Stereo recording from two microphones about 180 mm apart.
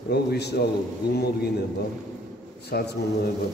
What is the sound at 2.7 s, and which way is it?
Speech, 60° left (ahead or behind).